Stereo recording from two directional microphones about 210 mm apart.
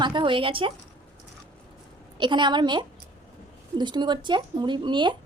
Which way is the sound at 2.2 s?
20° right (ahead or behind).